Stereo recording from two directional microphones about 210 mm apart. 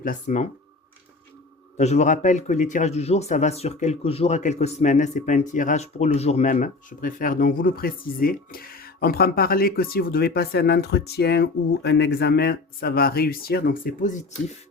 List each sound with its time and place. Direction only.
0.0 s a man's voice: 40° left (ahead or behind)
1.7 s a man's voice: 30° left (ahead or behind)